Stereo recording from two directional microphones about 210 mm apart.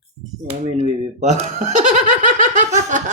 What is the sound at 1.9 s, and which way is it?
Snicker, 35° right (ahead or behind).